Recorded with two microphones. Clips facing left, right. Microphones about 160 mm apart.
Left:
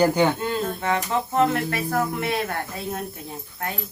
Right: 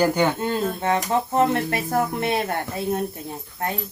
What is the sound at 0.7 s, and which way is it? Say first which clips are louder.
Speech: right 2 dB; 20° right (ahead or behind).